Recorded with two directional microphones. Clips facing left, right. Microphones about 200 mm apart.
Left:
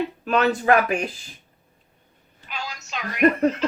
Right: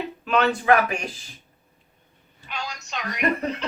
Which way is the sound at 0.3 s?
40° left (ahead or behind).